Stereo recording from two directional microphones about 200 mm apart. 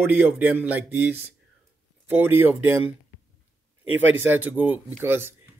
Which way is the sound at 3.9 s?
75° right (ahead or behind).